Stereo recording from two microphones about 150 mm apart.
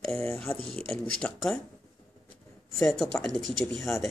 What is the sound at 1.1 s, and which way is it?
Speech, 5° left (ahead or behind).